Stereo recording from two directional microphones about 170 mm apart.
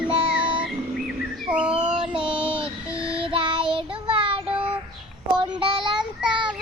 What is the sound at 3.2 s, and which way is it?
Child singing, 30° right (ahead or behind).